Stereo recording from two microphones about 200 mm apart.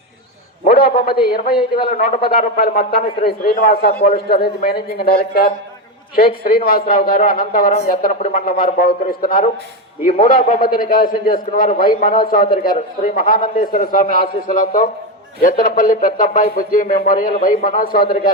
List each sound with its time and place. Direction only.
0.6 s a man's voice: 50° left (ahead or behind)